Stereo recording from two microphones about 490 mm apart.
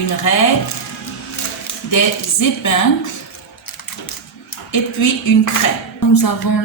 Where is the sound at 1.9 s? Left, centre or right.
Left.